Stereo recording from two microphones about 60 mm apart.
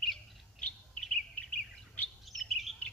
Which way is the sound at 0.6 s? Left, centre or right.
Centre.